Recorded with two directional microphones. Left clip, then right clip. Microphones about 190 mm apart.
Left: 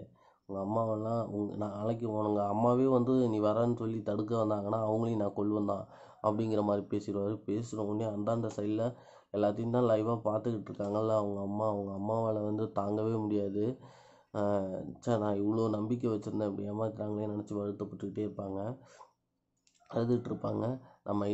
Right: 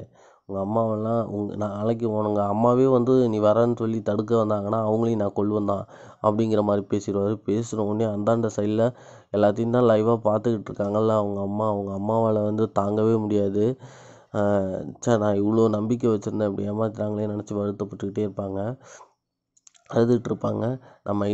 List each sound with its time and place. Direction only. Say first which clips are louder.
0.5 s speech: right 8 dB; 40° right (ahead or behind)
19.9 s speech: right 11 dB; 45° right (ahead or behind)